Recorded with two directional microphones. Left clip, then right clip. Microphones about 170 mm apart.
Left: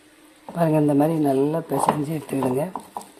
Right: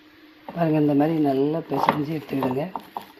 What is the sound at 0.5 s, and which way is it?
Speech, 15° left (ahead or behind).